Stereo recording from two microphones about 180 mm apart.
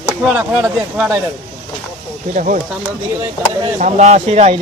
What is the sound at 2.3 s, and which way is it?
Speech, 45° right (ahead or behind).